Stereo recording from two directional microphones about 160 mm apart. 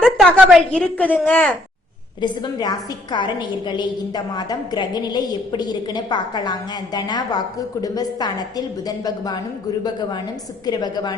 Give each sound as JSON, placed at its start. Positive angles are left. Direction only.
{"t": 0.0, "sound": "a woman's voice", "side_deg": 0}
{"t": 2.2, "sound": "a woman's voice", "side_deg": 25}
{"t": 10.7, "sound": "a woman's voice", "side_deg": 25}